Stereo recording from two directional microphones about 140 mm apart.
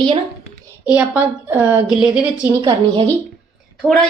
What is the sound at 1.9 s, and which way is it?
Speech, 5° right (ahead or behind).